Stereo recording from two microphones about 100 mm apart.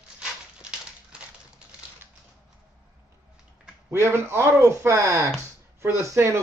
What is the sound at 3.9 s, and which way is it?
Speech, 25° right (ahead or behind).